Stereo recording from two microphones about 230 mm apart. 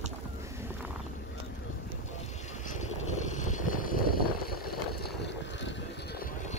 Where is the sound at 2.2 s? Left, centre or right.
Left.